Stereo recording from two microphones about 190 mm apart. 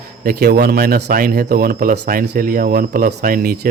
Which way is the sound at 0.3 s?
55° right (ahead or behind).